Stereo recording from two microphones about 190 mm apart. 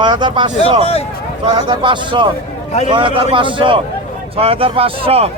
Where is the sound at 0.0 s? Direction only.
25° right (ahead or behind).